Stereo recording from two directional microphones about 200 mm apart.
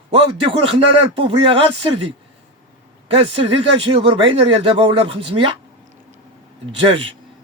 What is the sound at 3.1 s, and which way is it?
Speech, 30° right (ahead or behind).